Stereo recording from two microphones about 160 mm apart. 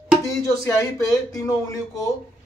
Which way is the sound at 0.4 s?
20° left (ahead or behind).